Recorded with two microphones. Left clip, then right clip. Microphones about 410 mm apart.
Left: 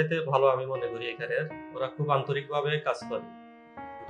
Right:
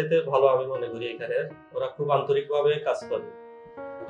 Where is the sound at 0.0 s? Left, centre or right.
Left.